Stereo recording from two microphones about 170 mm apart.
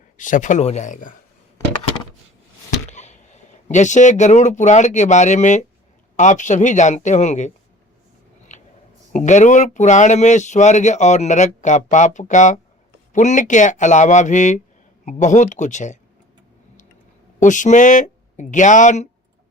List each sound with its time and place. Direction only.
0.2 s speech: 50° left (ahead or behind)
2.9 s speech: 45° left (ahead or behind)
8.5 s a sound: 45° left (ahead or behind)
9.1 s speech: 45° left (ahead or behind)
17.4 s speech: 50° left (ahead or behind)